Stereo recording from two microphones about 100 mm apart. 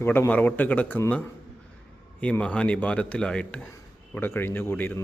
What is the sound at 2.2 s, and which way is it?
A man's voice, 10° left (ahead or behind).